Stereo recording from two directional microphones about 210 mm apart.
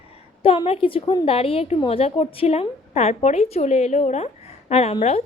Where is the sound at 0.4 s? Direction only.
25° left (ahead or behind).